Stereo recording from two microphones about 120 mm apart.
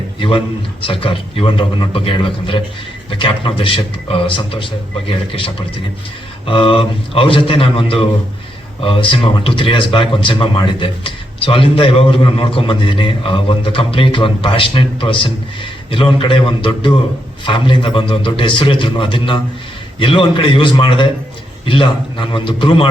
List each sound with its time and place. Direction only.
0.2 s speech: 50° left (ahead or behind)